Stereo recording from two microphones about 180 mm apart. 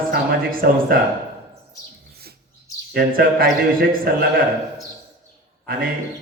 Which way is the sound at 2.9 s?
55° right (ahead or behind).